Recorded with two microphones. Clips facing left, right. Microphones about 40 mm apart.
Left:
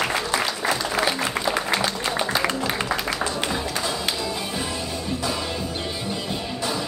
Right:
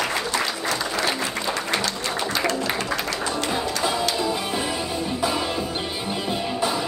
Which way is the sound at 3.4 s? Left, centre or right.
Centre.